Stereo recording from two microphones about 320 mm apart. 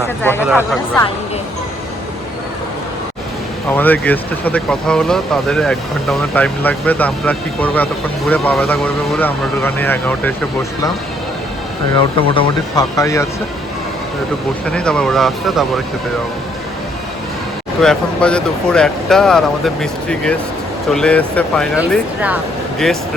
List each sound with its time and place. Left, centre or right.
0.2 s speech: centre
3.7 s speech: centre
12.3 s speech: centre
14.7 s speech: centre
17.7 s speech: centre